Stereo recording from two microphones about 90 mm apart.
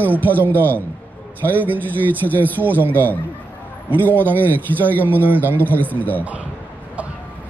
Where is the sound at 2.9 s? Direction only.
20° left (ahead or behind).